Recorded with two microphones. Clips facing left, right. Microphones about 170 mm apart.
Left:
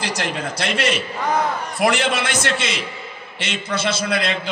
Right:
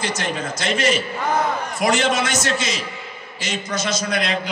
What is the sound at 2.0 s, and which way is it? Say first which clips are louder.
A man's voice: right 1 dB; 30° left (ahead or behind).